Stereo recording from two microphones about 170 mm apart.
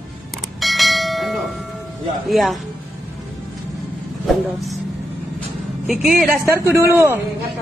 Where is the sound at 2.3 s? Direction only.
Centre (ahead or behind).